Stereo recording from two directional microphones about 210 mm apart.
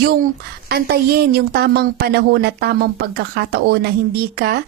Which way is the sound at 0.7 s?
50° right (ahead or behind).